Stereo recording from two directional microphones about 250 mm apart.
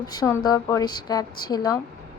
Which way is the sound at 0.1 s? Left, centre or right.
Centre.